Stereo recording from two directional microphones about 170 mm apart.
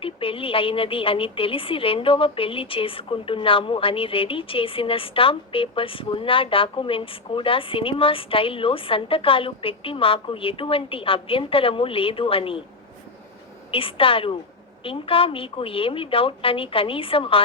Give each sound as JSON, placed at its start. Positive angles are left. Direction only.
{"t": 0.0, "sound": "a woman's voice", "side_deg": 30}
{"t": 13.7, "sound": "a woman's voice", "side_deg": 30}